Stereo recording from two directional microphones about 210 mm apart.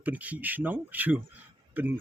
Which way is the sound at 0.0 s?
5° right (ahead or behind).